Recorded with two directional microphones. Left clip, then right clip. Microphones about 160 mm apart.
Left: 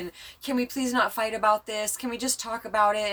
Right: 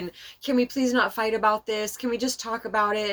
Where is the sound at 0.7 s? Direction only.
20° left (ahead or behind).